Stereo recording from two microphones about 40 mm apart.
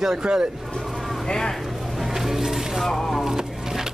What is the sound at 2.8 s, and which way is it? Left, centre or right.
Speech, centre.